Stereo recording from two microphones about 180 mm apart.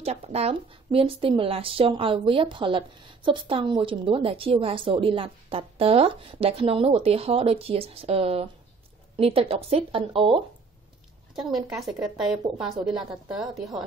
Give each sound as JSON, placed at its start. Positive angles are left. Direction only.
{"t": 0.0, "sound": "a woman's voice", "side_deg": -35}
{"t": 11.7, "sound": "speech", "side_deg": 0}